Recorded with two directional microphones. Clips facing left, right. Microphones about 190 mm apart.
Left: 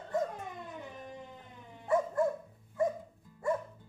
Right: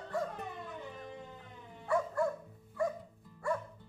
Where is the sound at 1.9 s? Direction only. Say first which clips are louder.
Left 3 dB; 20° left (ahead or behind).